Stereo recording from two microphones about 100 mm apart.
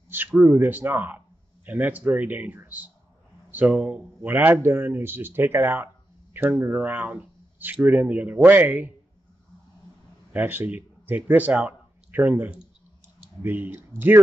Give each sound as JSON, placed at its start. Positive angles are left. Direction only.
{"t": 0.1, "sound": "a man's voice", "side_deg": -20}
{"t": 10.3, "sound": "a man's voice", "side_deg": -20}